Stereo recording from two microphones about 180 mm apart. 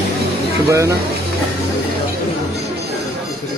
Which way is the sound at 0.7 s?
15° right (ahead or behind).